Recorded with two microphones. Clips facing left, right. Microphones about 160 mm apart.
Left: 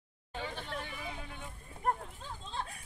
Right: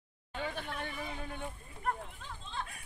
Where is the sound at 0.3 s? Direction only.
55° right (ahead or behind).